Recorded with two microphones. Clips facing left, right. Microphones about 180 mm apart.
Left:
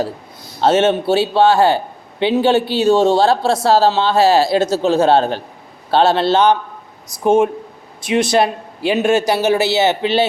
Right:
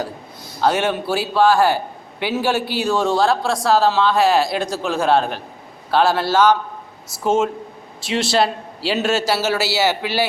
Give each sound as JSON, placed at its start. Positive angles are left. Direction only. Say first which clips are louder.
{"t": 0.6, "sound": "a man's voice", "louder": "left 5 dB", "side_deg": 25}